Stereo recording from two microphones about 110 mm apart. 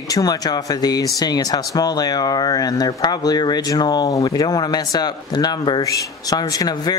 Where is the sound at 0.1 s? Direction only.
35° left (ahead or behind).